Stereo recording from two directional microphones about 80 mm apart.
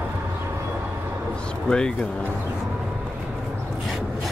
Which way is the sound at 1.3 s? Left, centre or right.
Centre.